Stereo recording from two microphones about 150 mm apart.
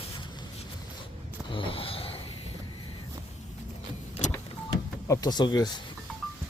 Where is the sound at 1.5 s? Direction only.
35° left (ahead or behind).